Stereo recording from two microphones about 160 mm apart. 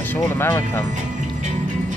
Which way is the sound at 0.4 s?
15° left (ahead or behind).